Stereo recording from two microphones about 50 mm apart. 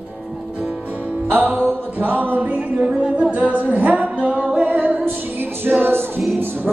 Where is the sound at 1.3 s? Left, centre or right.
Right.